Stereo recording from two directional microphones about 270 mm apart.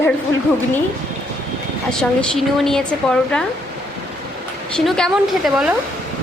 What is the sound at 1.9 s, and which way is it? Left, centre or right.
Speech, centre.